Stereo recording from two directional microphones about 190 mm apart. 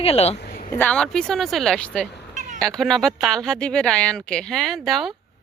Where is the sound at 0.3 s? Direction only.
55° left (ahead or behind).